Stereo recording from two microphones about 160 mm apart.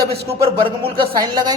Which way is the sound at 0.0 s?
80° right.